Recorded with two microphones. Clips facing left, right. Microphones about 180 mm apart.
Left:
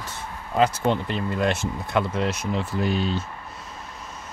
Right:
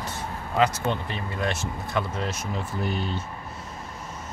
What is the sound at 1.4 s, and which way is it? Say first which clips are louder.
Speech: left 3 dB; 60° left (ahead or behind).